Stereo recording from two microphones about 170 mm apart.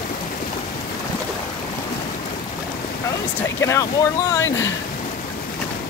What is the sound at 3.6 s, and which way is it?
Speech, 15° left (ahead or behind).